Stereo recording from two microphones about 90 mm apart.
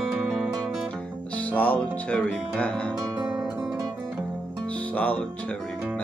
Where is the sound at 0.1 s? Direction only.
5° right (ahead or behind).